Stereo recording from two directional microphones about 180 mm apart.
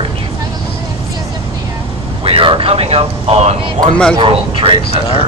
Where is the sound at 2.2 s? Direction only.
30° right (ahead or behind).